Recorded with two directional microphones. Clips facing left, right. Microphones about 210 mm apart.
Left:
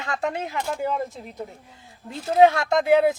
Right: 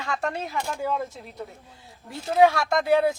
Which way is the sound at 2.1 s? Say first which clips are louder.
Left 2 dB; 20° left (ahead or behind).